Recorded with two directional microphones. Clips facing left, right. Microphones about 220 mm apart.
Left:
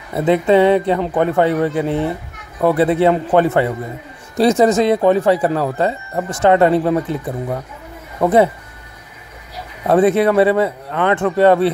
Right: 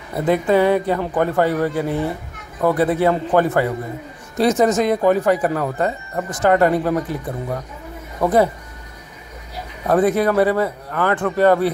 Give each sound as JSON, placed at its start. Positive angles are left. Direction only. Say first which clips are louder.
{"t": 0.1, "sound": "a man's voice", "louder": "left 3 dB", "side_deg": 25}
{"t": 8.2, "sound": "a man's voice", "louder": "left 3 dB", "side_deg": 25}
{"t": 9.8, "sound": "a man's voice", "louder": "left 3 dB", "side_deg": 25}